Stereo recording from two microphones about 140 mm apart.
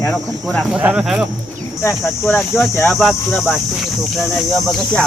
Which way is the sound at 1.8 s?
15° left (ahead or behind).